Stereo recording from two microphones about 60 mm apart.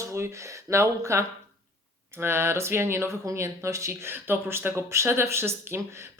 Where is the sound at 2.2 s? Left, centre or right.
Right.